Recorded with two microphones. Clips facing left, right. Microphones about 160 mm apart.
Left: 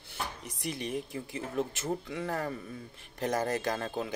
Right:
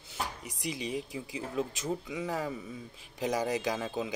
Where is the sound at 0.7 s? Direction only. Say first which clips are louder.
Even; 55° left (ahead or behind).